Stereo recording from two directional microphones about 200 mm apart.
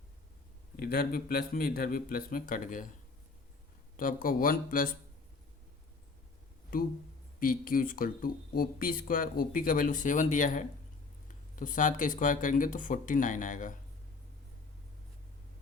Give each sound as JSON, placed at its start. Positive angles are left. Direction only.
{"t": 0.8, "sound": "speech", "side_deg": 50}
{"t": 3.9, "sound": "speech", "side_deg": 45}
{"t": 6.7, "sound": "speech", "side_deg": 45}